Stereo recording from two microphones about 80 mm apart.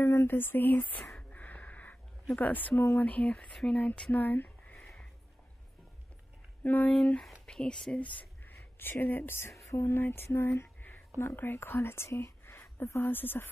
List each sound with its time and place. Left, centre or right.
0.0 s speech: left
1.3 s a sound: centre
2.3 s speech: left
4.7 s a sound: centre
6.6 s speech: left
9.7 s music: left
11.1 s speech: left